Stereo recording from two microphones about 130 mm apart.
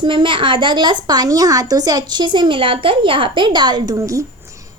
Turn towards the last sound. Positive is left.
turn(degrees=-25)  # may be behind; listen again after turning